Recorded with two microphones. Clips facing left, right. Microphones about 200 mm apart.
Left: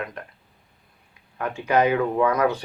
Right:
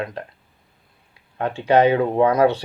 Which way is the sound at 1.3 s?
30° right (ahead or behind).